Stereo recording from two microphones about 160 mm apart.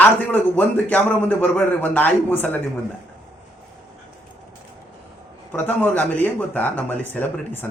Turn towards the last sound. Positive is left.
turn(degrees=10)  # may be behind; listen again after turning